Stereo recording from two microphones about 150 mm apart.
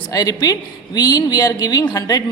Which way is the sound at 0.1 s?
25° left (ahead or behind).